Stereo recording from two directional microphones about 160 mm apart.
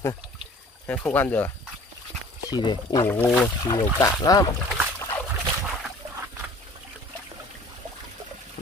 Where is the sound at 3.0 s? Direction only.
10° left (ahead or behind).